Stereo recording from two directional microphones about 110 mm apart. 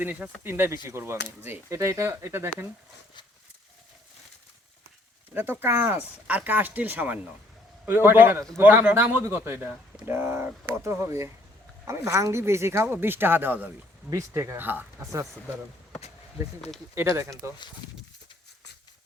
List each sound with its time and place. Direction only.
0.0 s speech: 15° right (ahead or behind)
5.3 s speech: 20° right (ahead or behind)
16.9 s speech: 25° right (ahead or behind)